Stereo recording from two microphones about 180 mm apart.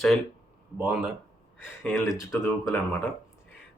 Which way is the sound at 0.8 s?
10° right (ahead or behind).